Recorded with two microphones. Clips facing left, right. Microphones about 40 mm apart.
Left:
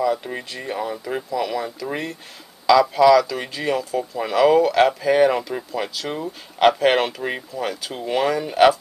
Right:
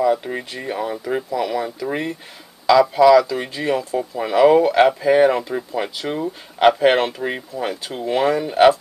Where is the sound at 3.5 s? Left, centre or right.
Centre.